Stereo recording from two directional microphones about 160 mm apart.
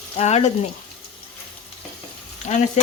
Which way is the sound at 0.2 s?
40° left (ahead or behind).